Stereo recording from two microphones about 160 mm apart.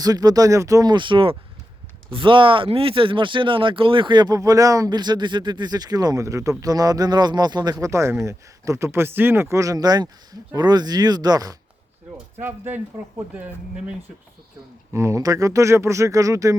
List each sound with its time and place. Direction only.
0.0 s speech: 25° right (ahead or behind)
12.4 s speech: 10° right (ahead or behind)
14.9 s speech: 20° right (ahead or behind)